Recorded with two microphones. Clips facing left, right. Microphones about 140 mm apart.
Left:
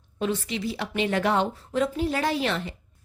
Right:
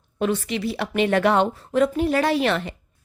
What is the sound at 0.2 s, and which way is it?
Speech, 60° right (ahead or behind).